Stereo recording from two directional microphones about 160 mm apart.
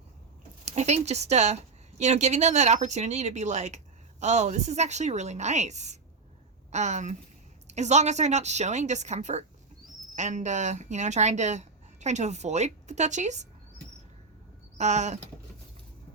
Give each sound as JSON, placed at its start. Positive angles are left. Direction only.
{"t": 0.6, "sound": "speech", "side_deg": -45}
{"t": 14.8, "sound": "speech", "side_deg": -45}